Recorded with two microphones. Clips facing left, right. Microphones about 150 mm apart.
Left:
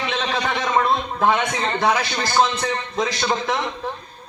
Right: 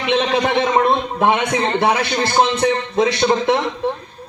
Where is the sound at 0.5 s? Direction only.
25° right (ahead or behind).